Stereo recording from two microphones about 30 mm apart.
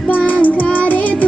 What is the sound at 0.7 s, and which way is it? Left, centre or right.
Music, left.